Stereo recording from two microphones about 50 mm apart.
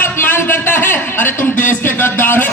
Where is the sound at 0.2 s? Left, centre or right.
Left.